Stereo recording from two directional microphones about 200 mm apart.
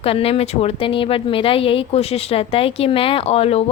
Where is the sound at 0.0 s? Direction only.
30° left (ahead or behind).